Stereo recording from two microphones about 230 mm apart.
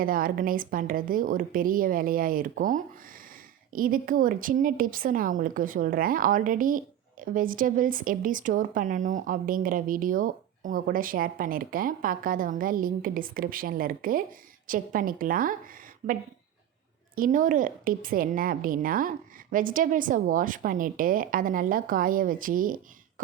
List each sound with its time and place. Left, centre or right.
0.0 s a woman's voice: right